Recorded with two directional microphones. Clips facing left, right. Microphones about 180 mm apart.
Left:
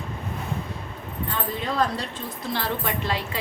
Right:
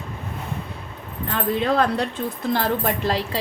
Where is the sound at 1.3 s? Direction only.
60° right (ahead or behind).